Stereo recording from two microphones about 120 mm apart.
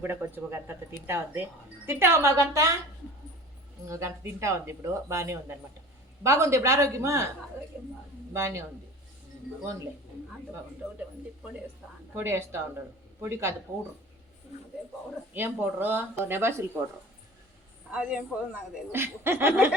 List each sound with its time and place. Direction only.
0.0 s speech: 20° right (ahead or behind)
3.8 s speech: 25° right (ahead or behind)
8.3 s speech: 20° right (ahead or behind)
12.1 s speech: 20° right (ahead or behind)
15.3 s speech: 15° right (ahead or behind)
17.9 s a man's voice: 5° right (ahead or behind)
18.9 s speech: 20° right (ahead or behind)